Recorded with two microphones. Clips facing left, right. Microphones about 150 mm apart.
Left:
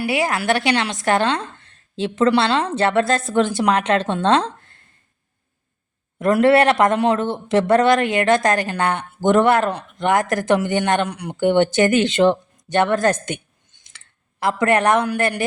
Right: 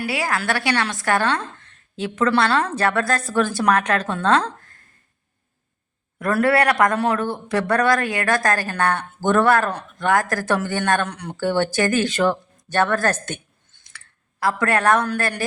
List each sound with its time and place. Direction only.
0.0 s a man's voice: 20° left (ahead or behind)
6.1 s a man's voice: 25° left (ahead or behind)